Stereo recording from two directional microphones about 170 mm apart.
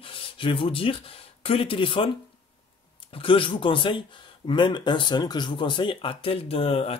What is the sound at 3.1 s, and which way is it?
Speech, 30° left (ahead or behind).